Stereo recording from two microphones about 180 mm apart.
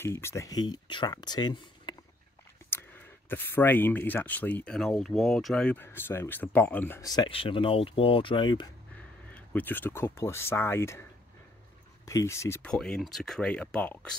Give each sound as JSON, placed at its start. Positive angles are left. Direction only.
{"t": 0.0, "sound": "speech", "side_deg": 15}
{"t": 2.7, "sound": "speech", "side_deg": 10}
{"t": 9.3, "sound": "speech", "side_deg": 10}
{"t": 12.1, "sound": "speech", "side_deg": 15}
{"t": 12.7, "sound": "speech", "side_deg": 5}